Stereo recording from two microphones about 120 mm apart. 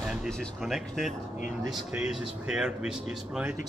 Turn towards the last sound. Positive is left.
turn(degrees=-5)  # may be behind; listen again after turning